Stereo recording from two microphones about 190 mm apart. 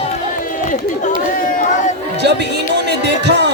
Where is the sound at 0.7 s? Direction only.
40° left (ahead or behind).